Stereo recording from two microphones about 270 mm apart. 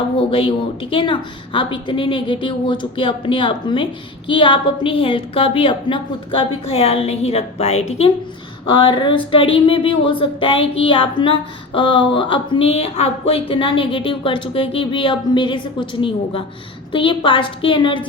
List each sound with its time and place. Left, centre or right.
0.2 s speech: centre